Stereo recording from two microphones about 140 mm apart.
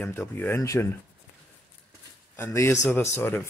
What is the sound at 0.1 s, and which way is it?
Speech, 15° left (ahead or behind).